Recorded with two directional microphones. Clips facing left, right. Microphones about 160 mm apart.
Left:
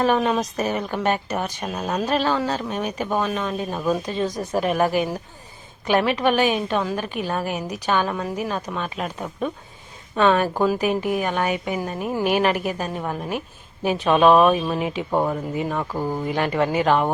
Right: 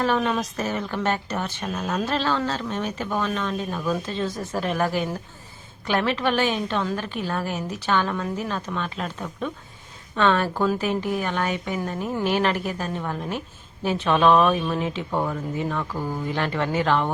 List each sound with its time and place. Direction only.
0.0 s a woman's voice: 15° left (ahead or behind)